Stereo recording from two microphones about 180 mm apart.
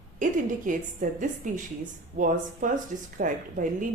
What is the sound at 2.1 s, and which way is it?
Speech, 45° right (ahead or behind).